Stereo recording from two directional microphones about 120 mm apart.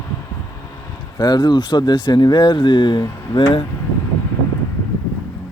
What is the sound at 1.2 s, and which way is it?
Speech, 35° left (ahead or behind).